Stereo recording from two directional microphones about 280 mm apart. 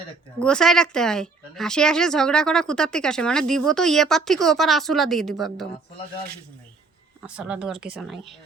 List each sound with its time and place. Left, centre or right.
0.3 s speech: centre
7.2 s speech: centre